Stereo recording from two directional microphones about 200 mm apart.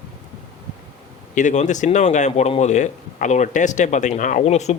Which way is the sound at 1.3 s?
35° left (ahead or behind).